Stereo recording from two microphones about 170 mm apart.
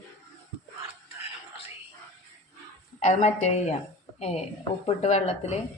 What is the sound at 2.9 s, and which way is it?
A woman's voice, 40° left (ahead or behind).